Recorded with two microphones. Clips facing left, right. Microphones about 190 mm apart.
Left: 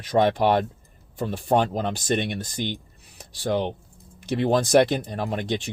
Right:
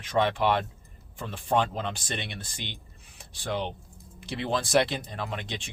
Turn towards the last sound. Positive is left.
turn(degrees=40)  # may be behind; listen again after turning